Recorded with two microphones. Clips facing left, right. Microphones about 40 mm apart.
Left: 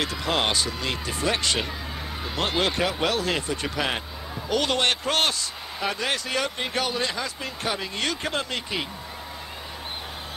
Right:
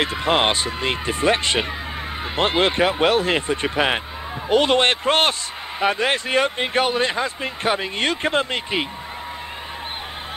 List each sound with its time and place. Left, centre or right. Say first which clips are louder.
0.0 s speech: right 6 dB; right